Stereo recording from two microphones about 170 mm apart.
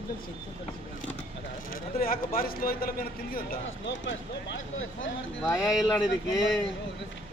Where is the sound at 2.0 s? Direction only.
60° left (ahead or behind).